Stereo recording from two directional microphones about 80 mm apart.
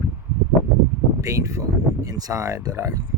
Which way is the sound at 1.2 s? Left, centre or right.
Right.